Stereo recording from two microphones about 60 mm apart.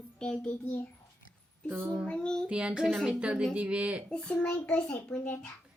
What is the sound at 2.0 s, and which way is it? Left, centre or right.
Speech, centre.